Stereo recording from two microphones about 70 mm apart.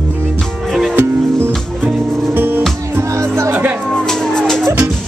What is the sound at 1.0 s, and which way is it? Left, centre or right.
Music, right.